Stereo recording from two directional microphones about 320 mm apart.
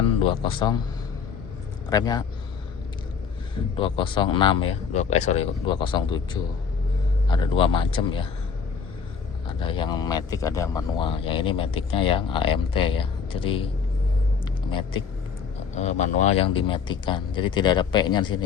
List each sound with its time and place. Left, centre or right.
0.2 s speech: centre
1.9 s speech: centre
3.8 s speech: centre
9.5 s speech: centre
14.7 s speech: centre